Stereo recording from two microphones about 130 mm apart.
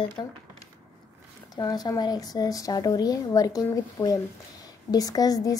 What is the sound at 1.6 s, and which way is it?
Speech, 30° left (ahead or behind).